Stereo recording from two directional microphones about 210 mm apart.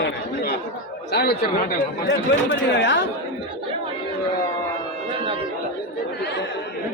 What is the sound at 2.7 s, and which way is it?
Speech, 60° left (ahead or behind).